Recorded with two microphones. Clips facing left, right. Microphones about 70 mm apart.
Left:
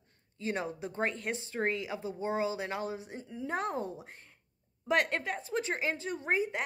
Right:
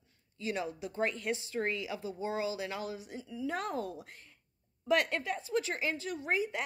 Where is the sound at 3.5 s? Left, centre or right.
Left.